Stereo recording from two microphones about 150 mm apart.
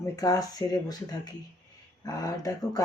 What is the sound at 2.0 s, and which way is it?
Speech, 25° left (ahead or behind).